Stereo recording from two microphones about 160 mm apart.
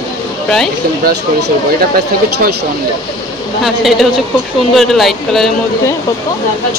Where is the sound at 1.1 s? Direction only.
80° right.